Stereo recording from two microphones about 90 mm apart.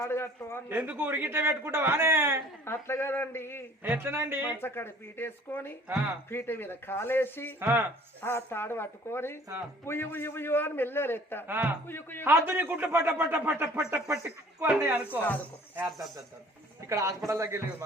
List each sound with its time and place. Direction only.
0.0 s a man's voice: 30° left (ahead or behind)
0.7 s a man's voice: 20° right (ahead or behind)
2.6 s a man's voice: 30° left (ahead or behind)
3.8 s a man's voice: 25° right (ahead or behind)
4.6 s a man's voice: 25° left (ahead or behind)
7.6 s a man's voice: 25° right (ahead or behind)
8.2 s a man's voice: 25° left (ahead or behind)
11.4 s a man's voice: 20° right (ahead or behind)
11.9 s a man's voice: 25° left (ahead or behind)
12.2 s a man's voice: 25° right (ahead or behind)
16.9 s a man's voice: 35° right (ahead or behind)